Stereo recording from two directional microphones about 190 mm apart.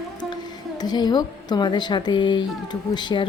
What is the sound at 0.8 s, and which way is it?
A woman's voice, 20° left (ahead or behind).